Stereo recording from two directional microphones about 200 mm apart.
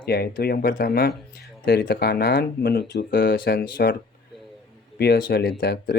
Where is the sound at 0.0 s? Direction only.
50° left (ahead or behind).